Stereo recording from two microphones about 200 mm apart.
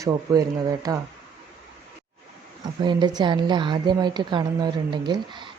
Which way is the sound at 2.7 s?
20° right (ahead or behind).